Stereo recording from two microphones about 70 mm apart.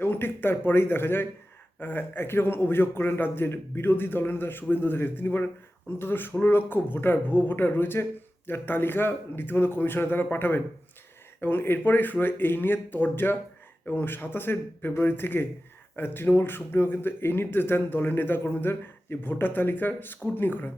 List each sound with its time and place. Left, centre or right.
0.0 s a man's voice: left